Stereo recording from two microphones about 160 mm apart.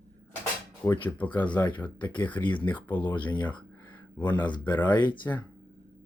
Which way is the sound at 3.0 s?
30° left (ahead or behind).